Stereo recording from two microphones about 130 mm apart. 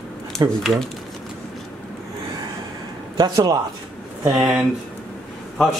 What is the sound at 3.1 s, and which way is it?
Speech, 30° right (ahead or behind).